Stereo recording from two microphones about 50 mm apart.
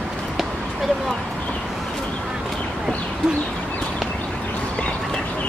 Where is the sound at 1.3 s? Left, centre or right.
Left.